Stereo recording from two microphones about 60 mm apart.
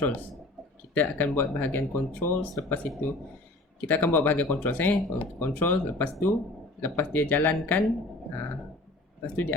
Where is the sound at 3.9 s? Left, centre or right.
Left.